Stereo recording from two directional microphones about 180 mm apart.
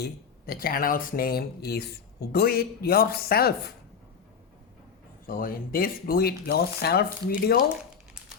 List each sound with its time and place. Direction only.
0.0 s speech: 55° left (ahead or behind)
5.2 s speech: 55° left (ahead or behind)